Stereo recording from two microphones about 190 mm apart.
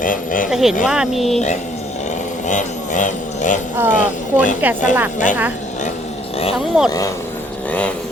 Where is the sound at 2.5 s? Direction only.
40° left (ahead or behind).